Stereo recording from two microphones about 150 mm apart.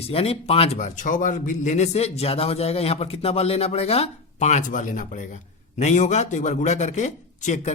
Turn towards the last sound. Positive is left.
turn(degrees=55)  # may be behind; listen again after turning